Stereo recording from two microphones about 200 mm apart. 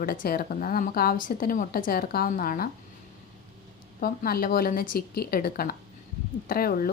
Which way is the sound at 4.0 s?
50° left (ahead or behind).